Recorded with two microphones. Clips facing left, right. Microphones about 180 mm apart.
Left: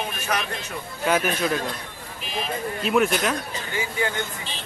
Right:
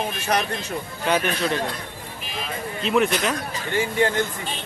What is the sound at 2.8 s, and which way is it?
Speech, centre (ahead or behind).